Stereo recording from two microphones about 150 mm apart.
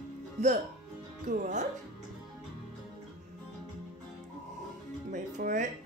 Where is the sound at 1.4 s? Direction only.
55° right (ahead or behind).